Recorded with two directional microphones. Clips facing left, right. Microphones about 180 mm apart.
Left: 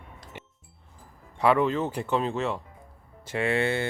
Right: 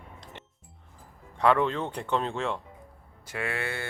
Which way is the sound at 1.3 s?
5° left (ahead or behind).